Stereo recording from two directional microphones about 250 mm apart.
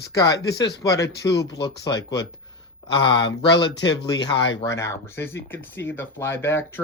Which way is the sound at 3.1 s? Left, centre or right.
Left.